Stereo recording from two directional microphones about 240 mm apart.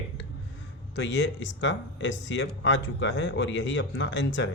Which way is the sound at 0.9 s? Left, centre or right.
Left.